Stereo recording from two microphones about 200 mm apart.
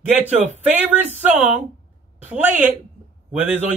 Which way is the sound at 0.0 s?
10° right (ahead or behind).